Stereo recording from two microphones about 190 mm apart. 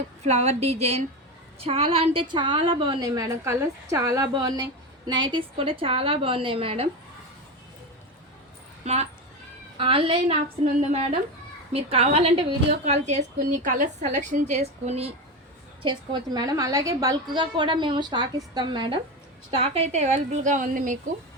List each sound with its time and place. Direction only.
0.3 s a woman's voice: 35° right (ahead or behind)
8.8 s a woman's voice: 35° right (ahead or behind)